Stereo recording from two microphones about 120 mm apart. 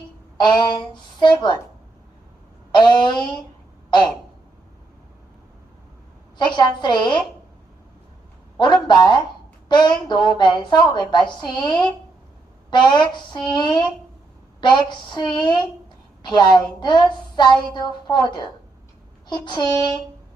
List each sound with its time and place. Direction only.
0.3 s a woman's voice: 40° left (ahead or behind)
2.7 s a woman's voice: 40° left (ahead or behind)
6.3 s a woman's voice: 40° left (ahead or behind)
8.5 s a woman's voice: 40° left (ahead or behind)